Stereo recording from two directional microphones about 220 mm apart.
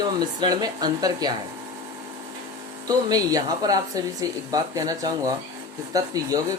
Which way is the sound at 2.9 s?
15° right (ahead or behind).